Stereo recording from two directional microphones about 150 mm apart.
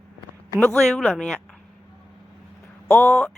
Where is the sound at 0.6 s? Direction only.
5° left (ahead or behind).